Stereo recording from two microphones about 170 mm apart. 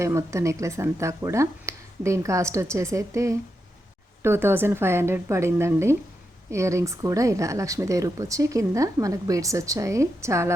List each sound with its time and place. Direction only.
0.0 s speech: 15° right (ahead or behind)